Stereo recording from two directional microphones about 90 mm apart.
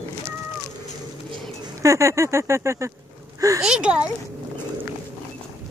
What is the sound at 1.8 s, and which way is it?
Speech, 35° right (ahead or behind).